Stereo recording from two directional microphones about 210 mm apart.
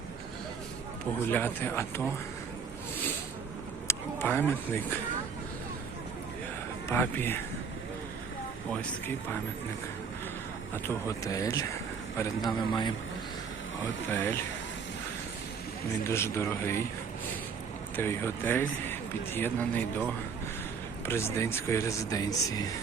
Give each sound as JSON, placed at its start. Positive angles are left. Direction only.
{"t": 1.3, "sound": "speech", "side_deg": 10}
{"t": 3.8, "sound": "speech", "side_deg": 10}
{"t": 6.8, "sound": "speech", "side_deg": 10}
{"t": 10.8, "sound": "a man's voice", "side_deg": 15}
{"t": 14.1, "sound": "speech", "side_deg": 10}
{"t": 16.0, "sound": "speech", "side_deg": 10}
{"t": 17.9, "sound": "speech", "side_deg": 10}